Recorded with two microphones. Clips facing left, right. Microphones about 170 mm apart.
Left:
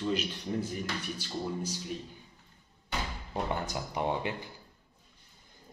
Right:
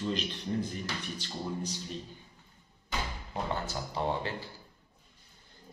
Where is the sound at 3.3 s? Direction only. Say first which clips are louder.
Left 1 dB; 15° left (ahead or behind).